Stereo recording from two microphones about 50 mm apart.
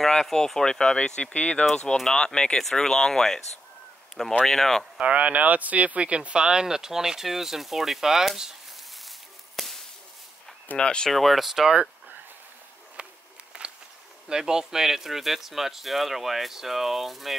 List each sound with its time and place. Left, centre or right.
0.0 s speech: centre; by 1.7 s left
1.7 s speech: centre
4.5 s speech: centre
4.9 s speech: right; by 8.5 s centre
9.6 s whip: centre
10.8 s speech: centre
11.1 s speech: centre
13.6 s walk: right
14.3 s speech: centre